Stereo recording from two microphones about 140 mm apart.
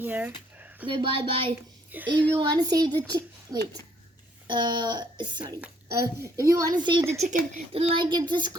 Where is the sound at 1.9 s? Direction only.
10° right (ahead or behind).